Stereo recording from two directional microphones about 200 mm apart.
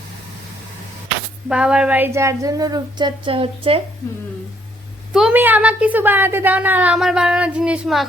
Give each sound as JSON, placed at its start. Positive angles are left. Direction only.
{"t": 1.5, "sound": "a woman's voice", "side_deg": -5}
{"t": 5.1, "sound": "a woman's voice", "side_deg": -5}